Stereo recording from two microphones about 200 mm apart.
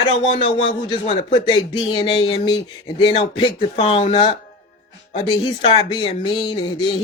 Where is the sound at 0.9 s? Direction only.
25° left (ahead or behind).